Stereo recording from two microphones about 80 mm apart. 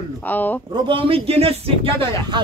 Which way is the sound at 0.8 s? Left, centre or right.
Right.